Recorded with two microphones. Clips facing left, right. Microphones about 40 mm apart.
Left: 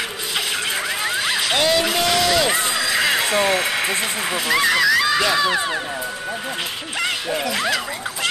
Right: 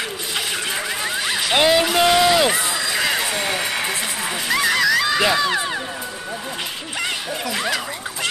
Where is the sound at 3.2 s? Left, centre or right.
Left.